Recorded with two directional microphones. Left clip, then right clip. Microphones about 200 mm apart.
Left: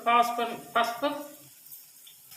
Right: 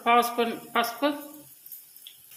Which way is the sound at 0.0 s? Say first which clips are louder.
Right 2 dB; 45° right (ahead or behind).